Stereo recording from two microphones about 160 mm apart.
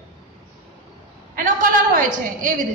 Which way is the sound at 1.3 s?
55° right (ahead or behind).